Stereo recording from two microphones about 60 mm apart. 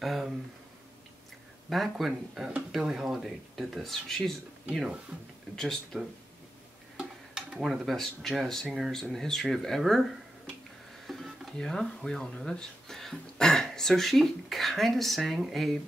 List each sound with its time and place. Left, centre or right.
0.0 s a sound: centre
1.7 s speech: centre
7.0 s speech: centre
9.1 s speech: centre
11.1 s stir: centre
11.5 s speech: centre